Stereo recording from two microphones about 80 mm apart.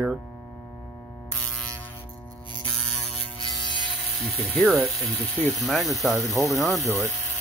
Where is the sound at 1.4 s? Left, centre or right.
Centre.